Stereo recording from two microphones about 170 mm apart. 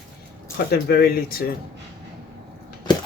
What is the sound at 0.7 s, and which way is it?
Speech, 70° left (ahead or behind).